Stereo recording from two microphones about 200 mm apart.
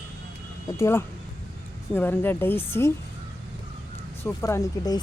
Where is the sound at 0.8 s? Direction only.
15° left (ahead or behind).